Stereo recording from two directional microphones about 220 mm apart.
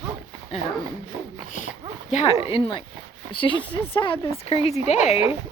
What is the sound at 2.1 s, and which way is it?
Speech, 30° left (ahead or behind).